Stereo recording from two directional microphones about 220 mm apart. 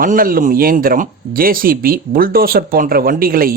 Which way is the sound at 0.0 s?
40° right (ahead or behind).